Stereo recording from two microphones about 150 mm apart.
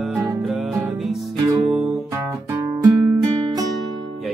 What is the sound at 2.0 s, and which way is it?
Music, 20° right (ahead or behind).